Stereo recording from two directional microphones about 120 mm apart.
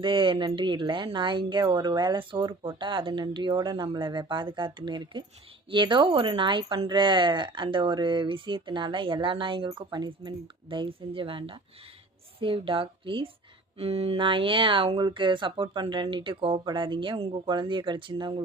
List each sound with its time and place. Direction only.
0.0 s speech: 45° right (ahead or behind)